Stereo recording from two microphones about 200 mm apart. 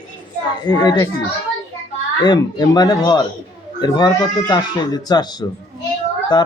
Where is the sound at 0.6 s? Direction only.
20° left (ahead or behind).